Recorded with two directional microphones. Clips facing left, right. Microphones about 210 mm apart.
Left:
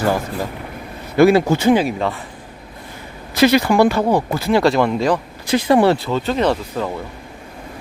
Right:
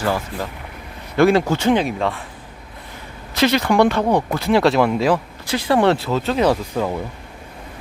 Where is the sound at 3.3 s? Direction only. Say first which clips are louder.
Left 3 dB; 10° left (ahead or behind).